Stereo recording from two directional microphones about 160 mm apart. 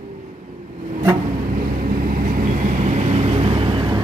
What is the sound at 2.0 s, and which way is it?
Vehicle, 60° right (ahead or behind).